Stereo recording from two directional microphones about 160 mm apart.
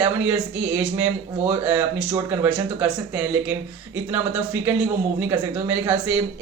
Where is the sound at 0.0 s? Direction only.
15° right (ahead or behind).